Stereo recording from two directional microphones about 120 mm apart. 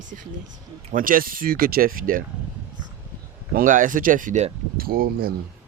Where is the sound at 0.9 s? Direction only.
90° right.